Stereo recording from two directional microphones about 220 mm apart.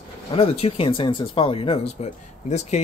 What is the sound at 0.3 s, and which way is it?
Speech, 25° left (ahead or behind).